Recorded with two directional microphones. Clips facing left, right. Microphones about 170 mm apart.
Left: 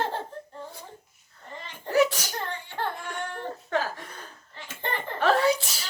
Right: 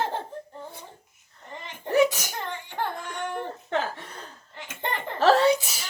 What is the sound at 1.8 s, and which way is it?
Sneeze, 15° right (ahead or behind).